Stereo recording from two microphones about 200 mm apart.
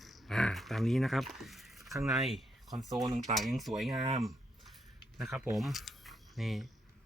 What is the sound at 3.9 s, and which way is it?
Speech, 30° right (ahead or behind).